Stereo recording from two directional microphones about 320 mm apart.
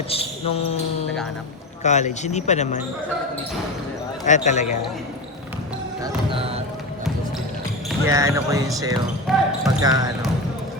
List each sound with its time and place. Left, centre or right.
0.1 s speech: centre
1.8 s speech: left
4.3 s speech: left
7.9 s speech: centre
9.3 s speech: centre
9.8 s speech: centre